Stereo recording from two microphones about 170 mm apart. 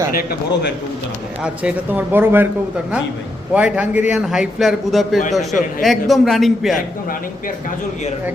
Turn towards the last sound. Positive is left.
turn(degrees=0)  # may be behind; listen again after turning